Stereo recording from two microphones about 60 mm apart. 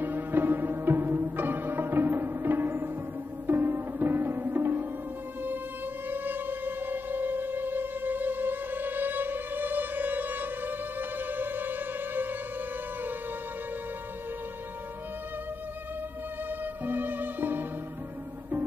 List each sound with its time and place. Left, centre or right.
0.0 s music: right
6.0 s music: right
16.4 s music: right